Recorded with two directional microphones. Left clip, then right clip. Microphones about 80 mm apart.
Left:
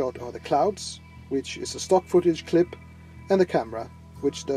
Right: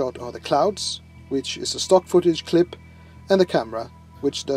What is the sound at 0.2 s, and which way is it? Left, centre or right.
Speech, right.